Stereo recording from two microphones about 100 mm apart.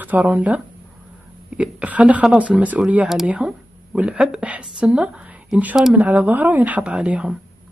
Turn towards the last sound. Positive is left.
turn(degrees=-10)  # may be behind; listen again after turning